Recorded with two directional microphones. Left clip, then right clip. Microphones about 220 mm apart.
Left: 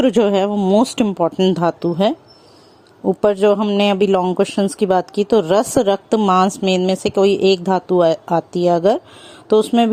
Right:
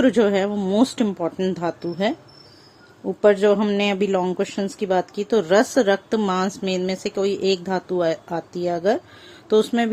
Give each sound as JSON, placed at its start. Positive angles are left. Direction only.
{"t": 0.0, "sound": "speech", "side_deg": 30}